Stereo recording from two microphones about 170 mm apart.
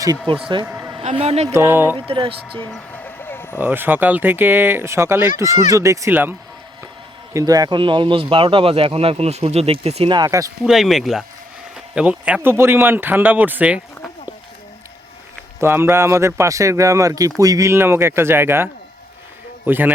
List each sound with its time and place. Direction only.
0.6 s a sound: 15° right (ahead or behind)
1.2 s speech: 35° right (ahead or behind)
1.5 s speech: 15° right (ahead or behind)
2.0 s speech: 30° right (ahead or behind)
2.6 s a sound: 10° left (ahead or behind)
3.6 s speech: 10° right (ahead or behind)
7.3 s speech: 20° right (ahead or behind)
10.6 s speech: centre (ahead or behind)
15.6 s speech: 15° right (ahead or behind)